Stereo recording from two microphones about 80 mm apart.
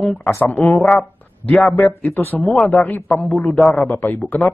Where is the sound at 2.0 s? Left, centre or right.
Left.